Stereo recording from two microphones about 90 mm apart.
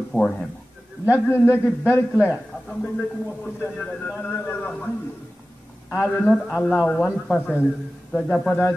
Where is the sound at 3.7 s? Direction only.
10° left (ahead or behind).